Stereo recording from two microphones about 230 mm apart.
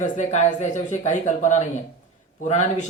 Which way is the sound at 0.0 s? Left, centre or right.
Left.